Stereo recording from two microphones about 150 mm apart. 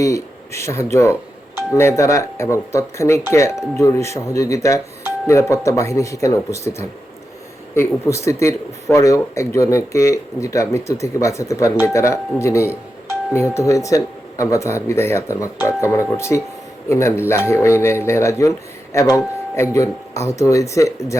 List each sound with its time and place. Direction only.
0.0 s speech: 20° left (ahead or behind)